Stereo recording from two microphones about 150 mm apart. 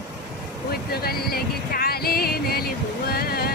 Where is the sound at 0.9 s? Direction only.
90° left.